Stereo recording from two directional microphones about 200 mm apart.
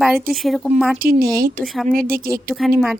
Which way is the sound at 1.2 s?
45° right (ahead or behind).